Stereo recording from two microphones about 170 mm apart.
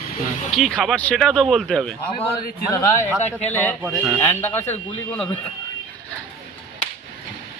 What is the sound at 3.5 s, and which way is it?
Speech, 10° left (ahead or behind).